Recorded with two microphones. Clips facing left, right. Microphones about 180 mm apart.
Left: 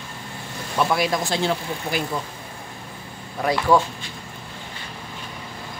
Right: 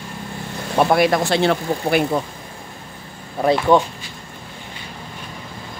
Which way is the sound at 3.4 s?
20° right (ahead or behind).